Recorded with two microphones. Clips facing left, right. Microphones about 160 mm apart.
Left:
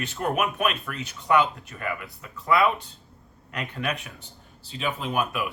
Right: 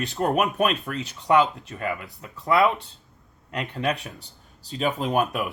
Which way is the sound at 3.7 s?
35° right (ahead or behind).